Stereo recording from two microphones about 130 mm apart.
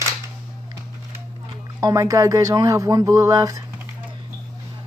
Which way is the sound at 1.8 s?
30° right (ahead or behind).